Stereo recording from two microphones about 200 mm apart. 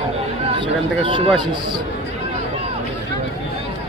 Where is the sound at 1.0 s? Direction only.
25° right (ahead or behind).